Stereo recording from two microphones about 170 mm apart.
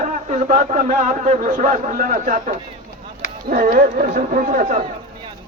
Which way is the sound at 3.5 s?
50° right (ahead or behind).